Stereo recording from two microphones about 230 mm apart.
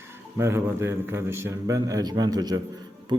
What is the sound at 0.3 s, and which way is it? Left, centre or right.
Speech, centre.